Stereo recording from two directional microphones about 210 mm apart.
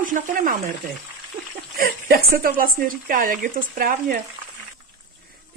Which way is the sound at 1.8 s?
45° right (ahead or behind).